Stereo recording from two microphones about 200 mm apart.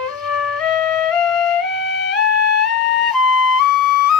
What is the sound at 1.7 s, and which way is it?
Music, 60° left (ahead or behind).